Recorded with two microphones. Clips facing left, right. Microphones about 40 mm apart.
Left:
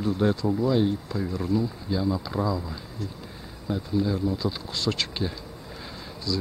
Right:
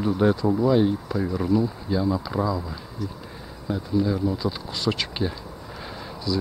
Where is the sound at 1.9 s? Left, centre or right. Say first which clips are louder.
Right 3 dB; centre.